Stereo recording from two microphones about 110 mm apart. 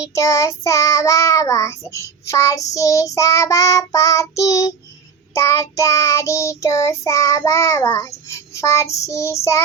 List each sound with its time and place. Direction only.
0.0 s child singing: 30° left (ahead or behind)